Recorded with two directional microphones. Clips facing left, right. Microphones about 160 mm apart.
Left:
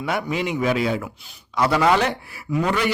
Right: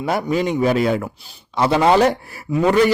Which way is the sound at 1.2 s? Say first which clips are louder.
Right 2 dB; 30° right (ahead or behind).